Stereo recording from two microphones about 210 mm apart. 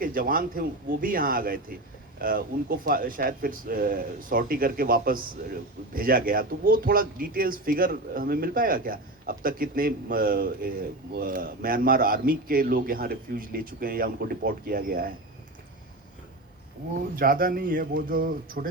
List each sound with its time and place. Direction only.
0.0 s speech: 45° right (ahead or behind)
17.2 s speech: 40° right (ahead or behind)